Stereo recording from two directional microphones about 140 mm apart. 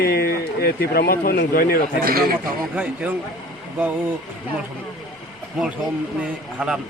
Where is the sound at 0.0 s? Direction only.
90° left.